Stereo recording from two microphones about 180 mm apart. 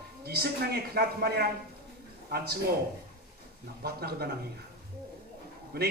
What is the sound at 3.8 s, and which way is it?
Speech, 60° right (ahead or behind).